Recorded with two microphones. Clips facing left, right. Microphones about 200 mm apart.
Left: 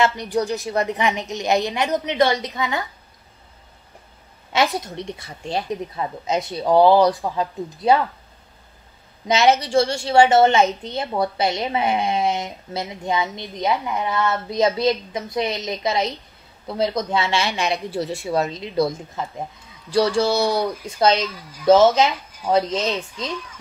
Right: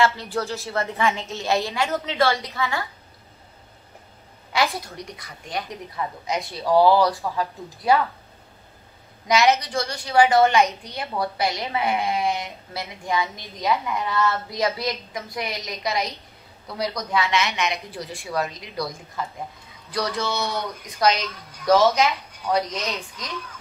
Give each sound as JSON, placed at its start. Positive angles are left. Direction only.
{"t": 0.0, "sound": "speech", "side_deg": 20}
{"t": 4.5, "sound": "a woman's voice", "side_deg": 20}
{"t": 9.3, "sound": "a woman's voice", "side_deg": 30}
{"t": 21.2, "sound": "speech", "side_deg": 0}
{"t": 21.6, "sound": "a woman's voice", "side_deg": 30}